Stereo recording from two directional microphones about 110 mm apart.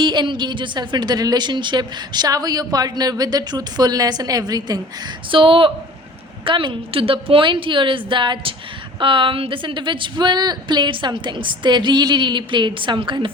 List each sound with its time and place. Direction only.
0.0 s a woman's voice: 45° right (ahead or behind)
5.3 s a woman's voice: 55° right (ahead or behind)